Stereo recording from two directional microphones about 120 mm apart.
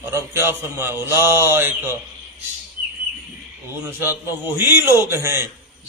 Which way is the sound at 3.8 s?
15° right (ahead or behind).